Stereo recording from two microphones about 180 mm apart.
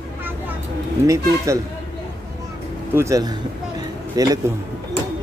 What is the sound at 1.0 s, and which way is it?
Speech, 15° right (ahead or behind).